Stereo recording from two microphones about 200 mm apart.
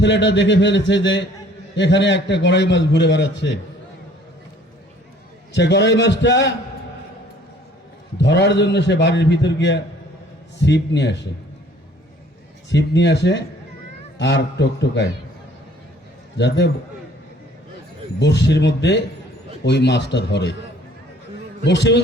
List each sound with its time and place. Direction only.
0.0 s a man's voice: 60° left (ahead or behind)
5.5 s a man's voice: 60° left (ahead or behind)
8.2 s a man's voice: 60° left (ahead or behind)
12.7 s a man's voice: 60° left (ahead or behind)
18.2 s a man's voice: 60° left (ahead or behind)
21.6 s a man's voice: 60° left (ahead or behind)